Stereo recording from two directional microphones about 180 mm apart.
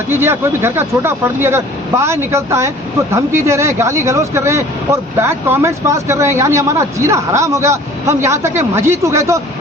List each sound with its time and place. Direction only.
0.1 s speech: 15° right (ahead or behind)